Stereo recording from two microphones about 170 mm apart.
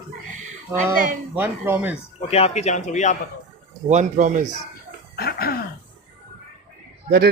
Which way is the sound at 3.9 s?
45° right (ahead or behind).